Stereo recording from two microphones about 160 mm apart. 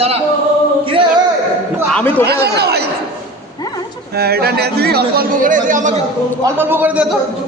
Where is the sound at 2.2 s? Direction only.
90° right.